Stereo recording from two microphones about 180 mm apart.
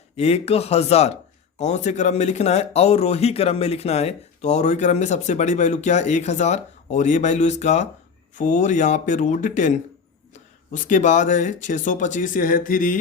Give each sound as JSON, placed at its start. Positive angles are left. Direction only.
{"t": 0.2, "sound": "speech", "side_deg": 35}